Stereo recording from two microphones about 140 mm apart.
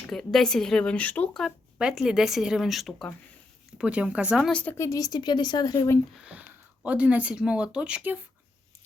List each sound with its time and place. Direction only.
0.1 s speech: 5° left (ahead or behind)
4.6 s speech: 20° left (ahead or behind)
6.2 s speech: 10° right (ahead or behind)